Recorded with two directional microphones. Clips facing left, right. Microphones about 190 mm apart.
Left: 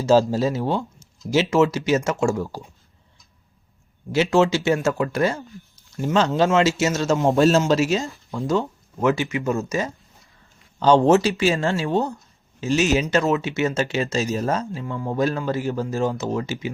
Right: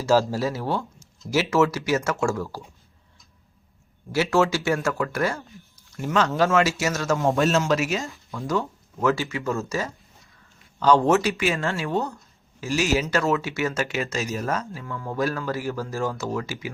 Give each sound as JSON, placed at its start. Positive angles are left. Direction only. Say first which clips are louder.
{"t": 0.0, "sound": "speech", "louder": "left 4 dB", "side_deg": 20}
{"t": 4.1, "sound": "speech", "louder": "left 3 dB", "side_deg": 20}
{"t": 8.5, "sound": "speech", "louder": "left 1 dB", "side_deg": 20}